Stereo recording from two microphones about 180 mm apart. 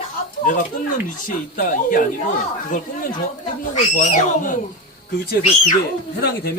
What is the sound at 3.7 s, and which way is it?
Speech, 45° left (ahead or behind).